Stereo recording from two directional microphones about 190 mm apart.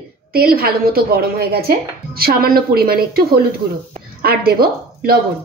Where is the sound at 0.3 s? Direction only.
50° right (ahead or behind).